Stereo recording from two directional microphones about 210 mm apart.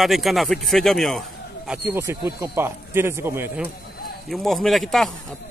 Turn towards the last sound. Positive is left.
turn(degrees=0)  # may be behind; listen again after turning